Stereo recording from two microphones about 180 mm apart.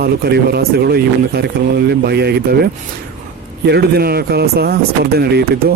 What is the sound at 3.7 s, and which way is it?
Speech, 60° right (ahead or behind).